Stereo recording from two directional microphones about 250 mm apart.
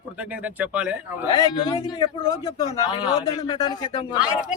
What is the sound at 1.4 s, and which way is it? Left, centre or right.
Speech, centre.